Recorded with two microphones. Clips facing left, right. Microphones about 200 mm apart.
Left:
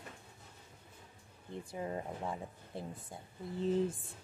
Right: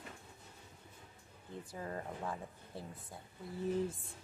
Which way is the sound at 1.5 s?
20° left (ahead or behind).